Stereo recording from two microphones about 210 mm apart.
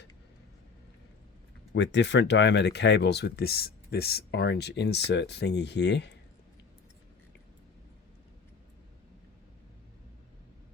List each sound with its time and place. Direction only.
1.7 s speech: 55° left (ahead or behind)